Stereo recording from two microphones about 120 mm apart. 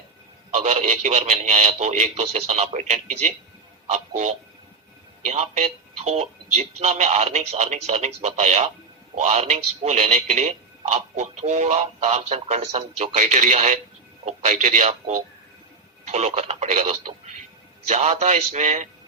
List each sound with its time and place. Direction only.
0.5 s speech: 70° right (ahead or behind); by 3.3 s 90° right
3.9 s speech: 75° right (ahead or behind)
9.1 s a man's voice: 65° right (ahead or behind)